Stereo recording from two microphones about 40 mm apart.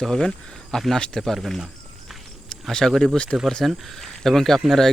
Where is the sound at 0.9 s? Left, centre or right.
Centre.